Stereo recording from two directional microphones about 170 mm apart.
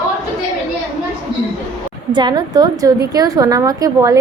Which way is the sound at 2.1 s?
25° right (ahead or behind).